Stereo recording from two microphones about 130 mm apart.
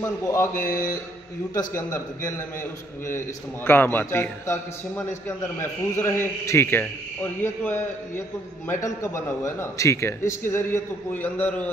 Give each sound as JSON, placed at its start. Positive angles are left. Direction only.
{"t": 0.0, "sound": "a man's voice", "side_deg": 25}
{"t": 3.6, "sound": "a man's voice", "side_deg": 15}
{"t": 8.8, "sound": "a man's voice", "side_deg": 25}